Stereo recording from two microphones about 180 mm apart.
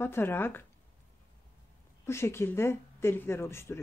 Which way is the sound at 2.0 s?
15° left (ahead or behind).